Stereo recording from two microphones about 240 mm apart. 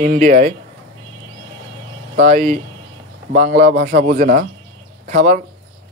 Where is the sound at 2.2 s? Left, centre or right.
Right.